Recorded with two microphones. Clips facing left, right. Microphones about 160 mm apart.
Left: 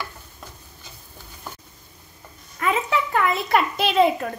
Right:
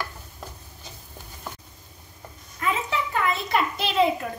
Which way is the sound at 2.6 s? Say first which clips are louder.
Left 4 dB; 70° left (ahead or behind).